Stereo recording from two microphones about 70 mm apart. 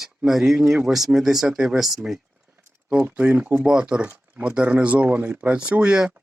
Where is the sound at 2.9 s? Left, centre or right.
Right.